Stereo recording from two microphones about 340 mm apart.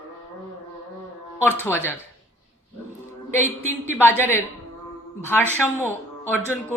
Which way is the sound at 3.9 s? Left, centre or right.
Centre.